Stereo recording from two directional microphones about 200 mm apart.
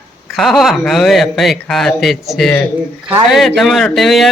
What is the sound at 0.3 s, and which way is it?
Speech, centre (ahead or behind).